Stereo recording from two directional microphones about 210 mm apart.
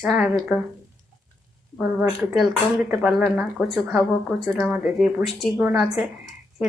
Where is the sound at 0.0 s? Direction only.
5° right (ahead or behind).